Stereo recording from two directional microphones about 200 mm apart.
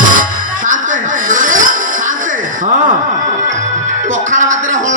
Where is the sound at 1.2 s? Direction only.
40° right (ahead or behind).